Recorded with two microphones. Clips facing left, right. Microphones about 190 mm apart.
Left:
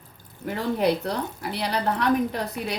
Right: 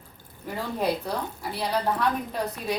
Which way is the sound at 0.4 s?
75° left (ahead or behind).